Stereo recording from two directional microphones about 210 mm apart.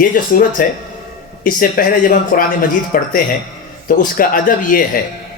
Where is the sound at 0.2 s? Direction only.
40° left (ahead or behind).